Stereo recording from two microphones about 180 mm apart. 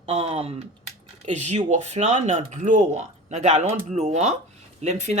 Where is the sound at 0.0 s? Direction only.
35° right (ahead or behind).